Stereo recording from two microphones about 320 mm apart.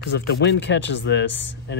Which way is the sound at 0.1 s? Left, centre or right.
Left.